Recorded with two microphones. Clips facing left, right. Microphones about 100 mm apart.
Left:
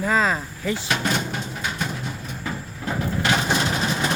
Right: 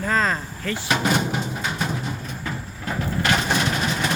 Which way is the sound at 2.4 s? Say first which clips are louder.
Left 1 dB; 10° left (ahead or behind).